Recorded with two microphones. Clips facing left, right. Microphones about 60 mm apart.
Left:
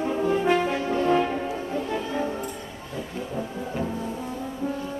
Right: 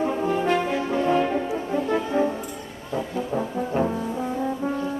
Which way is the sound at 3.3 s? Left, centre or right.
Right.